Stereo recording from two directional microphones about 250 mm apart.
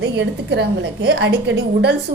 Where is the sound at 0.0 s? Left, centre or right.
Right.